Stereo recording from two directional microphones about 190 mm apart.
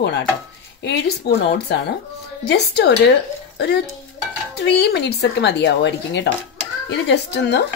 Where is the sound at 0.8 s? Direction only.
65° left (ahead or behind).